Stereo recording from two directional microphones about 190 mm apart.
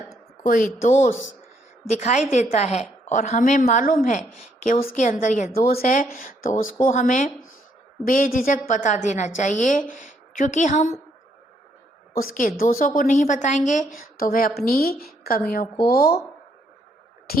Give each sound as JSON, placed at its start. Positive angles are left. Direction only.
{"t": 0.4, "sound": "a woman's voice", "side_deg": 45}
{"t": 5.5, "sound": "a woman's voice", "side_deg": 50}
{"t": 12.1, "sound": "a woman's voice", "side_deg": 50}
{"t": 17.3, "sound": "speech", "side_deg": 50}